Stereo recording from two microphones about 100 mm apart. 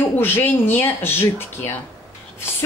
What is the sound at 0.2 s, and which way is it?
Speech, 20° left (ahead or behind).